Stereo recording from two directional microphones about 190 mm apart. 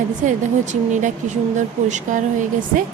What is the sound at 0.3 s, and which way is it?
Speech, 40° right (ahead or behind).